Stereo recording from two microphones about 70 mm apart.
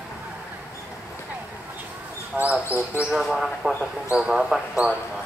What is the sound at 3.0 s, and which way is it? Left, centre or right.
Speech, centre.